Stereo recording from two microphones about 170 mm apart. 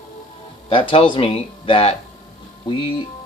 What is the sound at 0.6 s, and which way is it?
Speech, 30° left (ahead or behind).